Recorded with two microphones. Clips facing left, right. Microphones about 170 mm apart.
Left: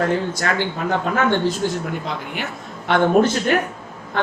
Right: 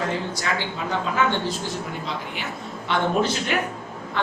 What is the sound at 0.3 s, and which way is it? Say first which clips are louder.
Speech: left 5 dB; 55° left (ahead or behind).